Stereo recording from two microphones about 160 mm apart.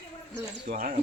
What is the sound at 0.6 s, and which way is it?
Speech, 65° right (ahead or behind).